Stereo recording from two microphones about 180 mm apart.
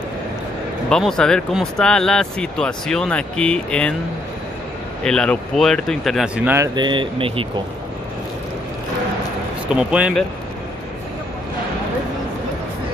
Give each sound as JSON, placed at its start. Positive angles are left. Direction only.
{"t": 0.8, "sound": "speech", "side_deg": 5}
{"t": 5.0, "sound": "speech", "side_deg": 5}
{"t": 6.7, "sound": "speech", "side_deg": -25}
{"t": 9.8, "sound": "speech", "side_deg": -5}